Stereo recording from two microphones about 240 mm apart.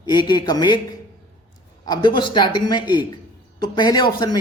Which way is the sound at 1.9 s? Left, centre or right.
Centre.